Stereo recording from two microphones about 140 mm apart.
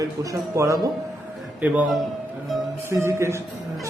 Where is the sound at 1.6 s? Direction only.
10° right (ahead or behind).